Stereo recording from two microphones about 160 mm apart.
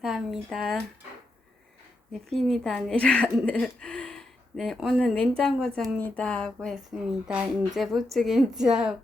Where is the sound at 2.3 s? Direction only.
Centre (ahead or behind).